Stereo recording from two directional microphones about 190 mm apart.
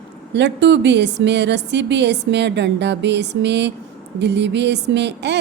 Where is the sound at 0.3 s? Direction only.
65° right (ahead or behind).